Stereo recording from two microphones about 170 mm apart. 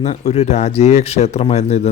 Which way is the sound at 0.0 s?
40° left (ahead or behind).